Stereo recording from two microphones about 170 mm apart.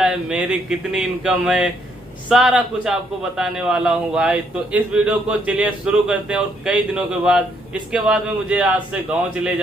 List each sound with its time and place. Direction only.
0.0 s a man's voice: 5° right (ahead or behind)